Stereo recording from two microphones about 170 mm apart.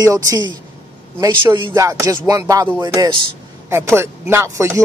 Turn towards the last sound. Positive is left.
turn(degrees=-15)  # may be behind; listen again after turning